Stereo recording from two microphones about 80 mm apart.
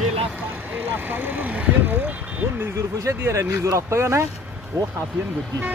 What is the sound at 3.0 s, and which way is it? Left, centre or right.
Speech, right.